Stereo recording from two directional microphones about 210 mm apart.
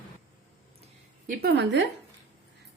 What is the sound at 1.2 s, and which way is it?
Speech, 50° right (ahead or behind).